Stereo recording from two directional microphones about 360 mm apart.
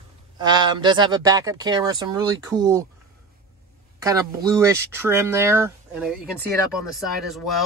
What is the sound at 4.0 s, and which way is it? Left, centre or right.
Speech, centre.